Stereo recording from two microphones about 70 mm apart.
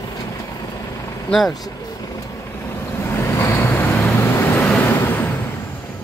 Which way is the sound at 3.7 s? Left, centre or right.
Left.